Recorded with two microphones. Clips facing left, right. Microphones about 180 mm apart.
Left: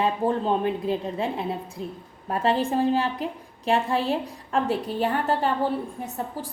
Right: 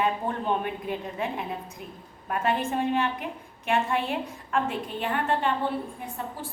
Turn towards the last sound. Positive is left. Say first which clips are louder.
# left 3 dB
turn(degrees=35)  # may be behind; listen again after turning